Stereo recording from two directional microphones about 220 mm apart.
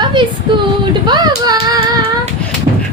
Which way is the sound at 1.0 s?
20° right (ahead or behind).